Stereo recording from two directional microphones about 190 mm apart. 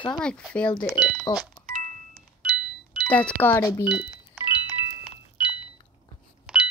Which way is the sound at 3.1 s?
10° left (ahead or behind).